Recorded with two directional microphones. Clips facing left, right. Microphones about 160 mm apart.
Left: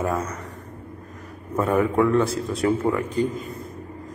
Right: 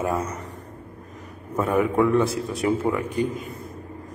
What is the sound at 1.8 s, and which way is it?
Speech, 15° right (ahead or behind).